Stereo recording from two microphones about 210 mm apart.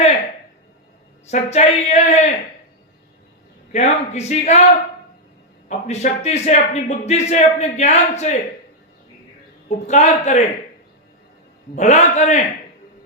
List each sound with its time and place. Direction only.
1.3 s speech: 30° left (ahead or behind)
3.7 s speech: 30° left (ahead or behind)
5.6 s speech: 35° left (ahead or behind)
9.6 s speech: 35° left (ahead or behind)
11.7 s speech: 35° left (ahead or behind)